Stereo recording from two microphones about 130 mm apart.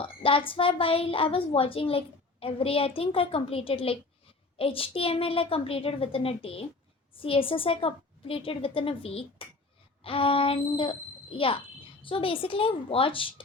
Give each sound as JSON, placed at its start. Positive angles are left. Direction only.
{"t": 0.0, "sound": "a woman's voice", "side_deg": 45}